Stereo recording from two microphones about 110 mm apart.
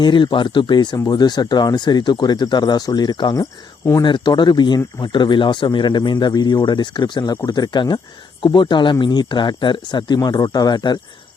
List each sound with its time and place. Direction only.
0.0 s speech: 45° left (ahead or behind)